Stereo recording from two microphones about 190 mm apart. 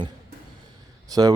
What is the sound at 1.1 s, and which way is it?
Speech, 20° right (ahead or behind).